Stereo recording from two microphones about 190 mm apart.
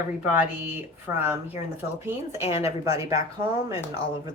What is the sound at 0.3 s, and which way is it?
A woman's voice, 10° right (ahead or behind).